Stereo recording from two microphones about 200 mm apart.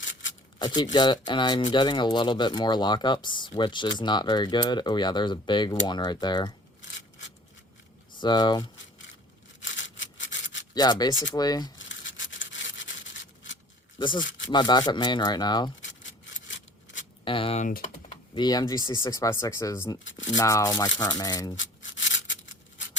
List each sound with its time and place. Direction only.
0.0 s shuffling cards: 65° left (ahead or behind)
0.6 s speech: 20° left (ahead or behind)
8.1 s speech: 20° left (ahead or behind)
9.6 s sawing: 65° left (ahead or behind)
10.8 s speech: 20° left (ahead or behind)
11.9 s rub: 65° left (ahead or behind)
14.0 s speech: 25° left (ahead or behind)
17.2 s speech: 25° left (ahead or behind)
21.5 s rub: 65° left (ahead or behind)